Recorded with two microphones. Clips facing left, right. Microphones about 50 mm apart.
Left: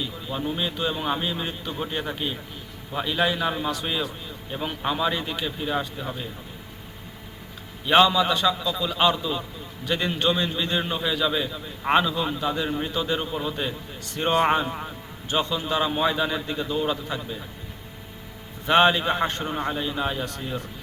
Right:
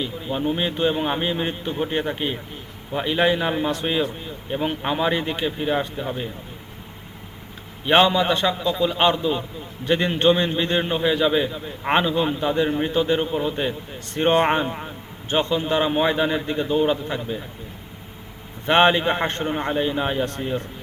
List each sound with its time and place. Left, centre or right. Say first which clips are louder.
0.0 s a man's voice: right 5 dB; right
7.9 s a man's voice: right 1 dB; right
14.7 s a man's voice: right 1 dB; centre
15.3 s a man's voice: right 4 dB; right
18.6 s a man's voice: right 2 dB; right
20.2 s a man's voice: right 6 dB; right